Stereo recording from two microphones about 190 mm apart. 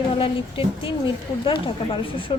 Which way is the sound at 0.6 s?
30° left (ahead or behind).